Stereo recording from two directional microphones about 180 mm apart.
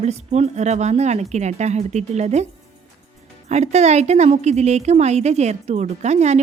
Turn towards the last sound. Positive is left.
turn(degrees=-40)  # may be behind; listen again after turning